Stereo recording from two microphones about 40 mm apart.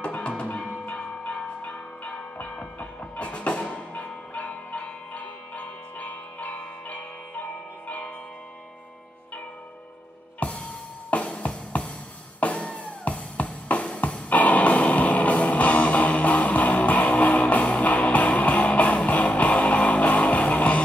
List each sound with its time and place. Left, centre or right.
0.8 s bell: left
2.8 s music: left
10.4 s music: left